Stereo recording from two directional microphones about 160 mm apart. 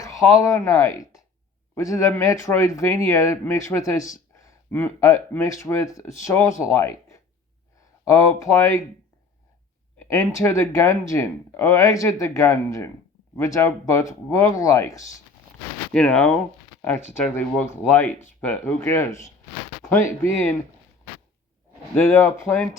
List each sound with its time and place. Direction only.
0.0 s speech: 20° left (ahead or behind)
10.0 s speech: 15° left (ahead or behind)
15.9 s speech: 5° left (ahead or behind)
21.9 s speech: 15° left (ahead or behind)